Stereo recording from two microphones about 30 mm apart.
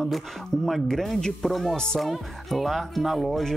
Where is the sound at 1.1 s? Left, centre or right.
Centre.